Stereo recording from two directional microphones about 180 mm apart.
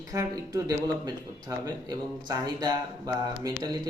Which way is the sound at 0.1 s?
20° right (ahead or behind).